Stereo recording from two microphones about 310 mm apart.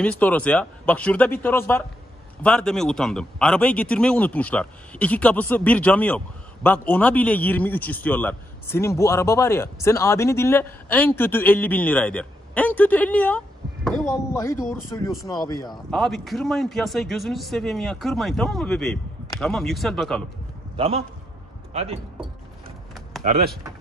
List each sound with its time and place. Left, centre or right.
0.0 s speech: centre
15.9 s speech: centre
20.7 s a man's voice: centre